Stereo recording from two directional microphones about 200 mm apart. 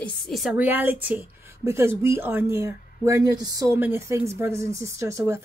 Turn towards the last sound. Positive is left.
turn(degrees=-15)  # may be behind; listen again after turning